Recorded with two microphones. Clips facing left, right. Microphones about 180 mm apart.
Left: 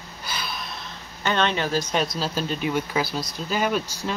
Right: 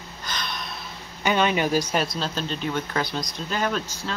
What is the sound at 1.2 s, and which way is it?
Speech, 10° right (ahead or behind).